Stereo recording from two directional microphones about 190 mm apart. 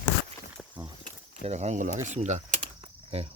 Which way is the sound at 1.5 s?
35° right (ahead or behind).